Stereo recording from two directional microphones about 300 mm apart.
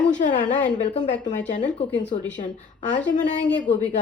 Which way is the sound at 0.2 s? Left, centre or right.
Left.